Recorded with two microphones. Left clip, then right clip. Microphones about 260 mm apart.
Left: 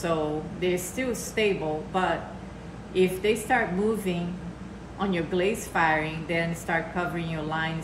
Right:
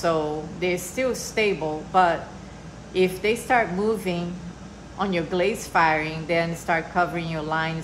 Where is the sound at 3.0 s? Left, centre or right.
Right.